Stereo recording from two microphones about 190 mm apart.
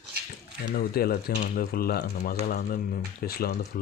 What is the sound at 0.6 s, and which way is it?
Speech, 50° left (ahead or behind).